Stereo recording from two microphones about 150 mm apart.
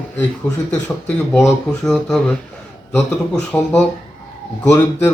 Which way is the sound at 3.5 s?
10° left (ahead or behind).